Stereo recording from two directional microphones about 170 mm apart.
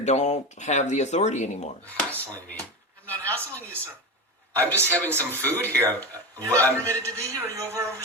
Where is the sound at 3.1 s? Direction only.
10° left (ahead or behind).